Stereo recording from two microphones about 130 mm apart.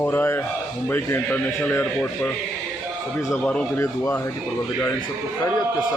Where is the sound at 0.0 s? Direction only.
15° left (ahead or behind).